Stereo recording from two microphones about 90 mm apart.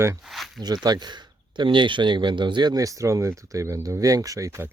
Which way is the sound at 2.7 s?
40° right (ahead or behind).